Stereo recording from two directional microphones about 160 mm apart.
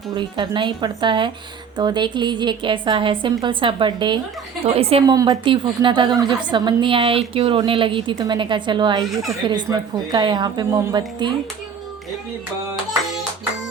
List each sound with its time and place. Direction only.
0.2 s a woman's voice: 30° right (ahead or behind)
5.0 s a woman's voice: 25° right (ahead or behind)